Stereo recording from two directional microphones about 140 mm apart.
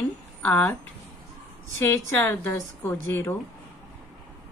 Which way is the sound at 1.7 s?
15° left (ahead or behind).